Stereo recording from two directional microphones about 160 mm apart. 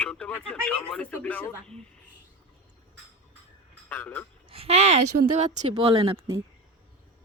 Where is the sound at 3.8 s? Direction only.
10° left (ahead or behind).